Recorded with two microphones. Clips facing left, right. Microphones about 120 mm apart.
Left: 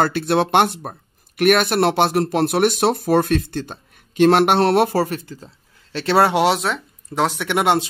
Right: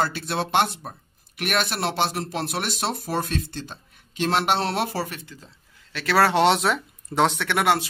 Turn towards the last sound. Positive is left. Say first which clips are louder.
# left 4 dB
turn(degrees=20)  # may be behind; listen again after turning